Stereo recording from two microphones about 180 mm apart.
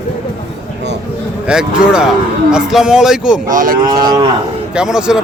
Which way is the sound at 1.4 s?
5° right (ahead or behind).